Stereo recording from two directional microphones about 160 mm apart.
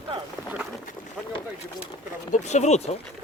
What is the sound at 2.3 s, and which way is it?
Speech, 45° left (ahead or behind).